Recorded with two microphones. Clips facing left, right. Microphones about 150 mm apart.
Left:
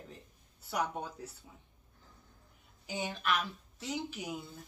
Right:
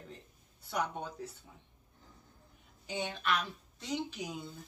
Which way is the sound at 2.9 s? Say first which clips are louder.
Even; 5° left (ahead or behind).